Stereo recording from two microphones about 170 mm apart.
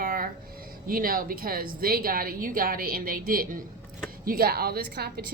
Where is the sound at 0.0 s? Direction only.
60° right (ahead or behind).